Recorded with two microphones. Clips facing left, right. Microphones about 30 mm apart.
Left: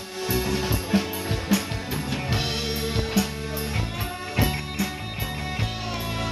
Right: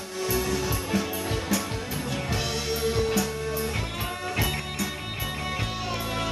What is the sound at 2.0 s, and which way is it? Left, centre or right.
Music, left.